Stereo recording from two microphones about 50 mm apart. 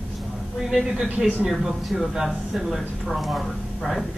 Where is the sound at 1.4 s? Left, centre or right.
Centre.